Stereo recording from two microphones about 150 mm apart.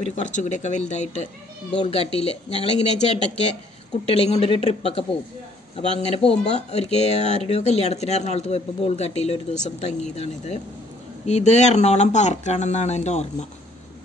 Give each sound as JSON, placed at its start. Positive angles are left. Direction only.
{"t": 0.0, "sound": "speech", "side_deg": 55}